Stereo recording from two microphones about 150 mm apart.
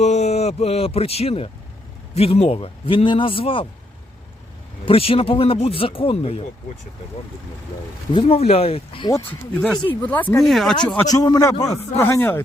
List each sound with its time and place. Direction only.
0.0 s a man's voice: 50° left (ahead or behind)
4.9 s a man's voice: 40° left (ahead or behind)
8.1 s a man's voice: 40° left (ahead or behind)
9.6 s speech: 5° left (ahead or behind)
10.4 s speech: centre (ahead or behind)
11.0 s a man's voice: 25° left (ahead or behind)